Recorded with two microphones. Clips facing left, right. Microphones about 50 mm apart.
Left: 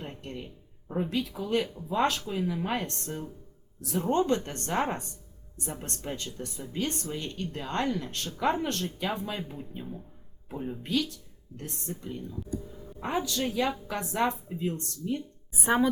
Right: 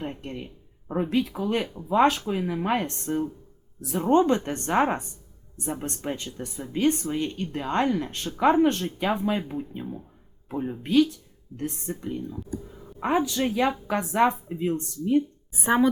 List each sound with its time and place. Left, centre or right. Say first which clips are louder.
0.0 s speech: right 5 dB; right
15.6 s a woman's voice: right 4 dB; centre